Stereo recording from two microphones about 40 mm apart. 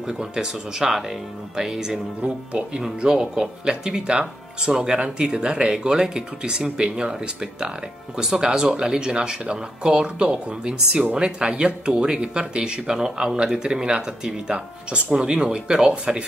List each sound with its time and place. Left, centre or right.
0.0 s speech: centre
8.2 s speech: centre